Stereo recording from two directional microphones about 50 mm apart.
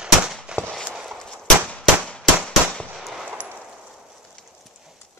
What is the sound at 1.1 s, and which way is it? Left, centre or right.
Clang, centre.